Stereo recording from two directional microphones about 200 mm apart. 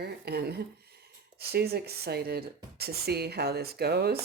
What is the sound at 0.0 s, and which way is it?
Speech, 55° right (ahead or behind).